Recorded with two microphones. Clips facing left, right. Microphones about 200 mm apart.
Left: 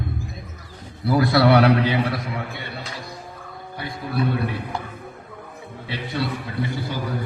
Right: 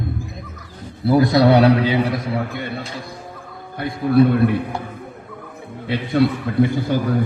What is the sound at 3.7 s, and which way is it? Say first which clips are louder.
Speech: right 11 dB; 55° right (ahead or behind).